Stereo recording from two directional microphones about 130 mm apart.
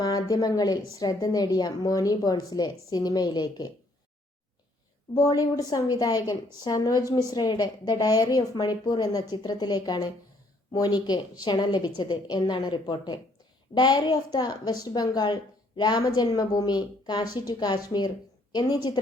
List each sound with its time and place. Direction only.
0.0 s a woman's voice: 30° left (ahead or behind)
5.1 s a woman's voice: 25° left (ahead or behind)